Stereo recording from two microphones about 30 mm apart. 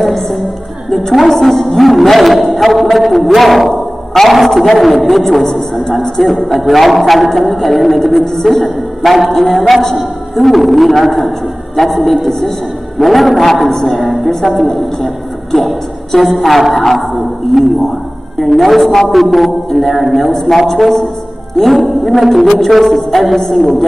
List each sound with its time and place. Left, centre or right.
0.0 s a sound: centre
0.8 s a man's voice: centre
5.4 s a woman's voice: centre
16.2 s a man's voice: centre
18.4 s a man's voice: centre